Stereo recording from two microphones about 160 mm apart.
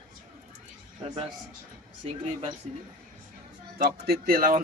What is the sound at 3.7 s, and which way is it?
Speech, 80° right.